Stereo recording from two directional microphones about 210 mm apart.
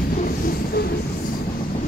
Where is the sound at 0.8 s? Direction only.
50° left (ahead or behind).